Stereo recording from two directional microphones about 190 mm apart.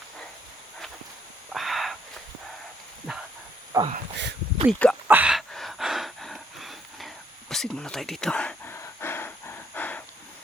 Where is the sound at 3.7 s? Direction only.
15° right (ahead or behind).